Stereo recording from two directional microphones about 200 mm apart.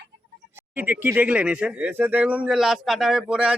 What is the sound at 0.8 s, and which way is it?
Speech, 10° right (ahead or behind).